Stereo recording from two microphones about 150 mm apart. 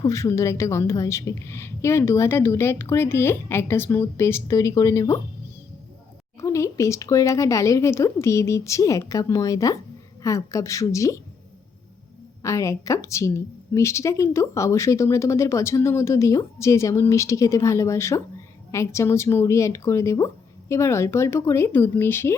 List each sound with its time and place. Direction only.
0.0 s a woman's voice: 20° left (ahead or behind)
6.4 s speech: 20° left (ahead or behind)
12.4 s speech: 20° left (ahead or behind)